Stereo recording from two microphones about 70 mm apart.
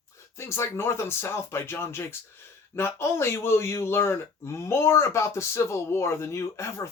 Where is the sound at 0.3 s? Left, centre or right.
Left.